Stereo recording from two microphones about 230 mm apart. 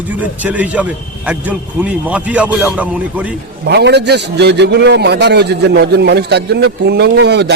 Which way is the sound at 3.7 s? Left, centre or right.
Right.